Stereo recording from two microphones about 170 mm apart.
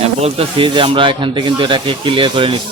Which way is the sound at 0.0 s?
35° right (ahead or behind).